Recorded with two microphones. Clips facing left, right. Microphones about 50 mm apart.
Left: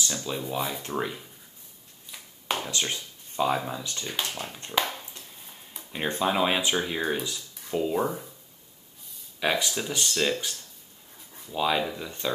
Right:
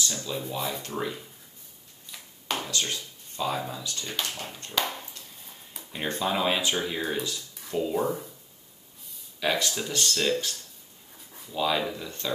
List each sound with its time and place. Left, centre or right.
0.1 s speech: left
0.4 s speech: centre
2.0 s a sound: centre
2.8 s speech: left
4.6 s a sound: left
5.7 s a sound: centre
6.0 s speech: centre
9.4 s speech: centre
11.5 s speech: centre